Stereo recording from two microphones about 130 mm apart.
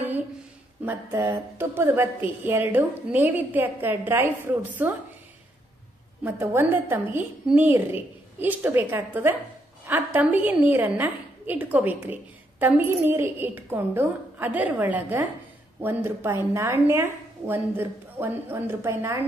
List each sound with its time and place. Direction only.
0.8 s a woman's voice: 20° right (ahead or behind)
6.2 s a woman's voice: 15° right (ahead or behind)